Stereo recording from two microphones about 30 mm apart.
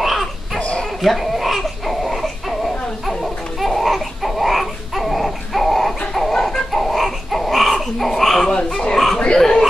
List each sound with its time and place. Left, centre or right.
0.0 s dog: centre
1.0 s crying: centre
3.6 s babbling: centre
6.7 s a sound: centre
8.1 s speech: centre
8.5 s dog: left
8.9 s a sound: centre
9.4 s chuckle: centre